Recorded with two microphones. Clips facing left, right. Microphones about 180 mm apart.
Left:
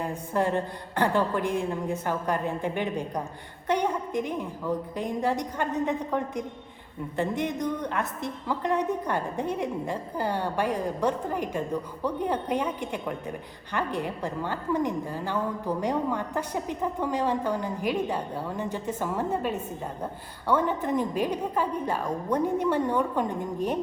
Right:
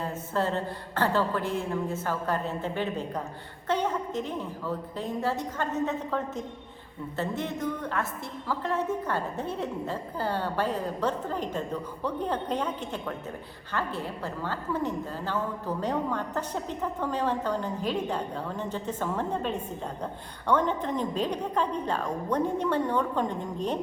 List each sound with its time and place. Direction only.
0.0 s a woman's voice: 15° left (ahead or behind)